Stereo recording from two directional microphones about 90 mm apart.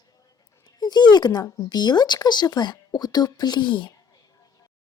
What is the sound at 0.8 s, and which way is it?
Speech, 50° left (ahead or behind).